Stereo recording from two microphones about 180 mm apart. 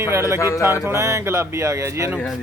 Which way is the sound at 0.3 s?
15° left (ahead or behind).